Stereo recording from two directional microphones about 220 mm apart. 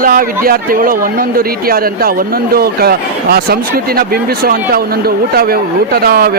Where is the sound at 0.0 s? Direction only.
40° right (ahead or behind).